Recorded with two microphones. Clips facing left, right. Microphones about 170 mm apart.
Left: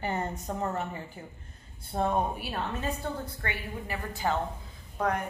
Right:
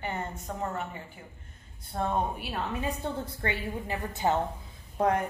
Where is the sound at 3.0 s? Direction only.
20° right (ahead or behind).